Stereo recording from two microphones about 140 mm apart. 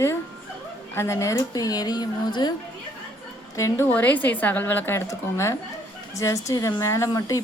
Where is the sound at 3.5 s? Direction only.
20° left (ahead or behind).